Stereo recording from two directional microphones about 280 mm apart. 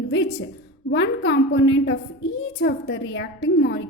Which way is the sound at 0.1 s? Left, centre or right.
Left.